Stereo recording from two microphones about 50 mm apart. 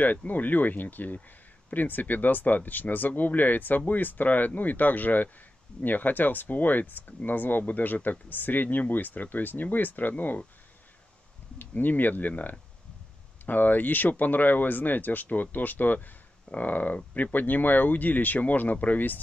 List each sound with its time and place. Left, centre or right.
0.3 s speech: left
11.5 s speech: left